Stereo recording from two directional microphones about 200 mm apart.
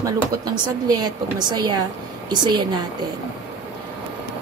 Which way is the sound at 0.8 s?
20° right (ahead or behind).